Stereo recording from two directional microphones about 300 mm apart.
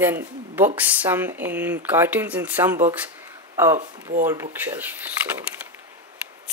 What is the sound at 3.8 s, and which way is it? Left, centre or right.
Speech, right.